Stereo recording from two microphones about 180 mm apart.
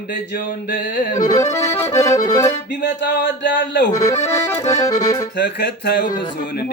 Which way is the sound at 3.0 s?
80° left.